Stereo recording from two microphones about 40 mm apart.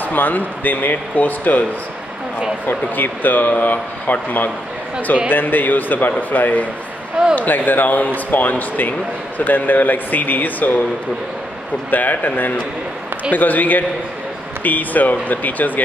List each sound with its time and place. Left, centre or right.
0.0 s speech: left
2.6 s speech: left
11.9 s speech: left